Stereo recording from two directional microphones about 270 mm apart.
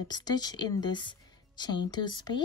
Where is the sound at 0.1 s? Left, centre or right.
Centre.